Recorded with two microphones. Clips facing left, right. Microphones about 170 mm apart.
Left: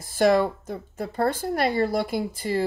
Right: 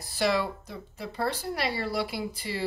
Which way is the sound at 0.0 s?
50° left (ahead or behind).